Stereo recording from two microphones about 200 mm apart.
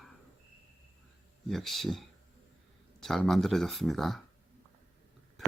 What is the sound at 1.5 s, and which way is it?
Speech, centre (ahead or behind).